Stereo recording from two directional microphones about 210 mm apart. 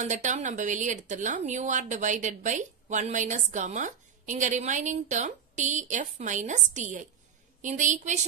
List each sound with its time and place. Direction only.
0.0 s speech: 35° right (ahead or behind)